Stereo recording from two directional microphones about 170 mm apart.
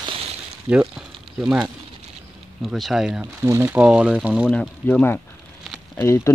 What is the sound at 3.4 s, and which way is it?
Speech, 15° right (ahead or behind).